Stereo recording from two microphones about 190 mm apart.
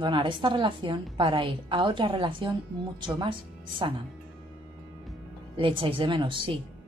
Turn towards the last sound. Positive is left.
turn(degrees=-25)  # may be behind; listen again after turning